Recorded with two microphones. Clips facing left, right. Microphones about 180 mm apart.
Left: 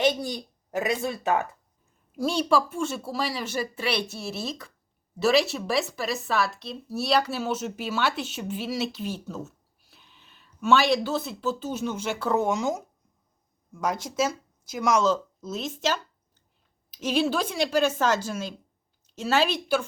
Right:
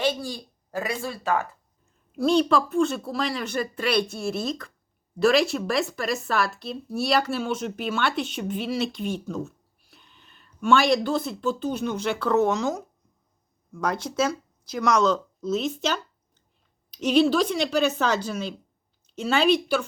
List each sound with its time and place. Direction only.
0.0 s speech: 20° left (ahead or behind)
2.1 s speech: 5° left (ahead or behind)